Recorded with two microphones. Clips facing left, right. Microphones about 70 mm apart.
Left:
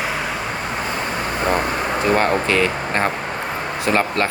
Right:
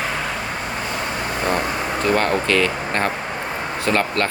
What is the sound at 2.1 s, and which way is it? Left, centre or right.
Speech, left.